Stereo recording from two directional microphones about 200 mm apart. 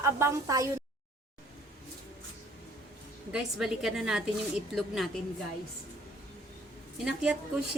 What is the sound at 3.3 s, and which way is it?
A woman's voice, centre (ahead or behind).